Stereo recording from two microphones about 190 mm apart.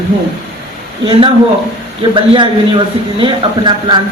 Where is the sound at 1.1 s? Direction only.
30° right (ahead or behind).